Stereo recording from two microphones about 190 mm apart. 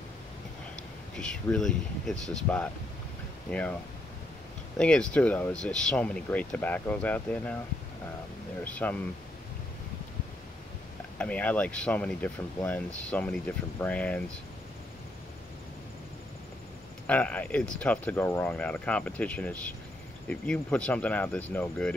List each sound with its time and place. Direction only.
1.1 s speech: 5° left (ahead or behind)
4.7 s speech: 5° left (ahead or behind)
8.6 s speech: 5° left (ahead or behind)
11.1 s speech: 5° left (ahead or behind)
17.0 s speech: 5° left (ahead or behind)